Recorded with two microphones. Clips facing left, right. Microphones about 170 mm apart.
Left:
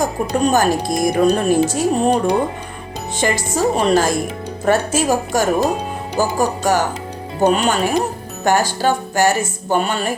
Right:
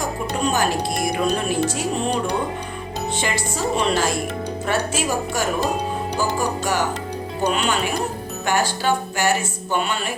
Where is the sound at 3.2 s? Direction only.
45° left (ahead or behind).